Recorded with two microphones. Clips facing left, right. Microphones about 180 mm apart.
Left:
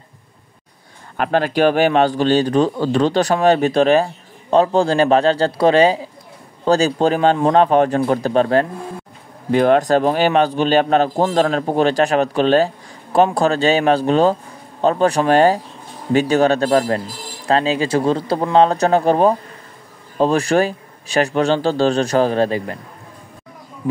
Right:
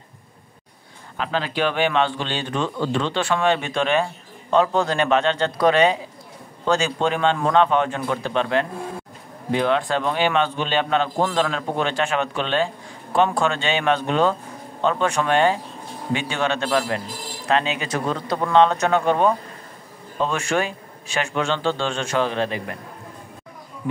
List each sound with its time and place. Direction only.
1.1 s speech: 55° left (ahead or behind); by 22.8 s 40° left (ahead or behind)